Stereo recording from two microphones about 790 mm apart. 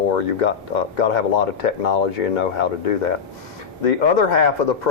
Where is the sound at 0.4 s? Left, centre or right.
Left.